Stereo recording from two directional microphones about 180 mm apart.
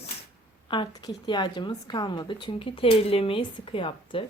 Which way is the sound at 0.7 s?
25° left (ahead or behind).